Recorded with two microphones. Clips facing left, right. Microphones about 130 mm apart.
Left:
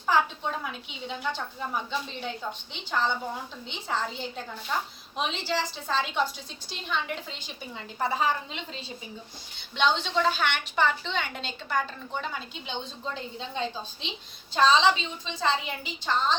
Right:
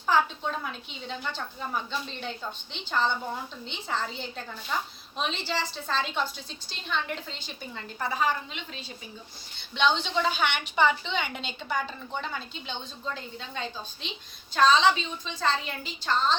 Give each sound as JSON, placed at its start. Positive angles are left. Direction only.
{"t": 0.1, "sound": "a woman's voice", "side_deg": 5}
{"t": 7.9, "sound": "a woman's voice", "side_deg": 25}
{"t": 9.7, "sound": "a woman's voice", "side_deg": 0}
{"t": 13.1, "sound": "a woman's voice", "side_deg": 25}